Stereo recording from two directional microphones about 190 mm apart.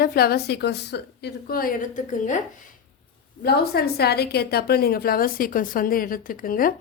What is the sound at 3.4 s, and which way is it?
Speech, 55° left (ahead or behind).